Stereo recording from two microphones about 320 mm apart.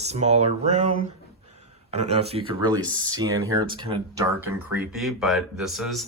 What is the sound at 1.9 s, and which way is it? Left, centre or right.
Speech, centre.